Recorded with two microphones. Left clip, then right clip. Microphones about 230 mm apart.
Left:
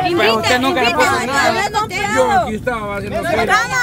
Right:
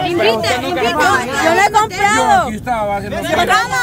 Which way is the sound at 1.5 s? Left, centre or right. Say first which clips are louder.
Right 6 dB; right.